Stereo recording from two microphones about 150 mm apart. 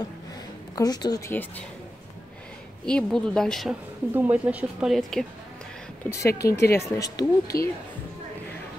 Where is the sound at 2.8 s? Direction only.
5° left (ahead or behind).